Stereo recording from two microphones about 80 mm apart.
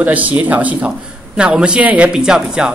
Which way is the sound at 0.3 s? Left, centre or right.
Centre.